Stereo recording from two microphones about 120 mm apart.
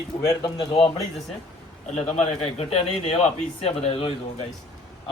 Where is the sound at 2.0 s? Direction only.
60° left (ahead or behind).